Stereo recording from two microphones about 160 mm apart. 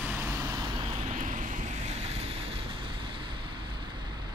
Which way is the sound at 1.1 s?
55° right (ahead or behind).